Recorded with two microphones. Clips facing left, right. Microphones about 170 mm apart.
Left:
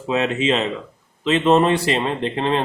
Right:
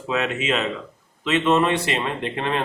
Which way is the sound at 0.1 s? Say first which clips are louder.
Left 4 dB; 30° left (ahead or behind).